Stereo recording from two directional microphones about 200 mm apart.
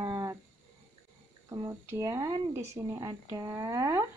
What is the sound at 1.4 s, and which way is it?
Speech, 15° right (ahead or behind).